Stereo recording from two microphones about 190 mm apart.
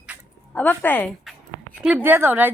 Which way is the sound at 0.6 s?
10° left (ahead or behind).